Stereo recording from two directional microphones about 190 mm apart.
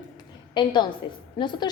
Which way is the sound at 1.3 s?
25° left (ahead or behind).